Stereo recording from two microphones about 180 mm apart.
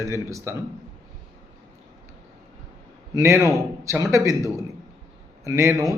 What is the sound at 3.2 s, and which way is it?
A man's voice, 15° right (ahead or behind).